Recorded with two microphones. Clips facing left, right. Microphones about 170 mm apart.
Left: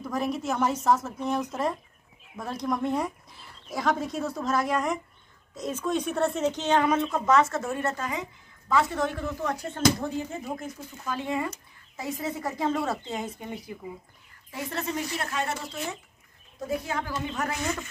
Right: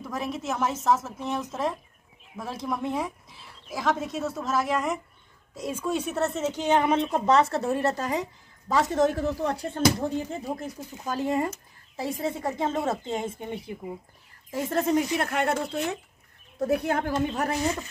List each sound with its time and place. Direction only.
0.0 s a woman's voice: centre (ahead or behind); by 11.5 s 40° right (ahead or behind)
12.0 s speech: 30° right (ahead or behind)
14.5 s speech: 45° right (ahead or behind)
17.3 s a woman's voice: 35° right (ahead or behind)